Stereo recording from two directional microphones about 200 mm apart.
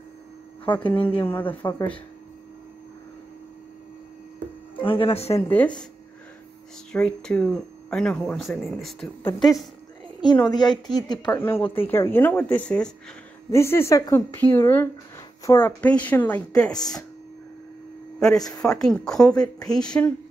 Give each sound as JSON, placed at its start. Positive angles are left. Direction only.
{"t": 0.8, "sound": "speech", "side_deg": 5}
{"t": 4.8, "sound": "speech", "side_deg": 25}
{"t": 5.3, "sound": "speech", "side_deg": 10}
{"t": 6.9, "sound": "speech", "side_deg": 5}
{"t": 9.2, "sound": "speech", "side_deg": 15}
{"t": 11.6, "sound": "speech", "side_deg": 10}
{"t": 18.5, "sound": "speech", "side_deg": 5}